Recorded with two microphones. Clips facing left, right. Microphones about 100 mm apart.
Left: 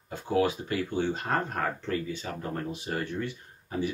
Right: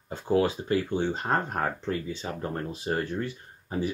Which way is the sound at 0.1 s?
30° right (ahead or behind).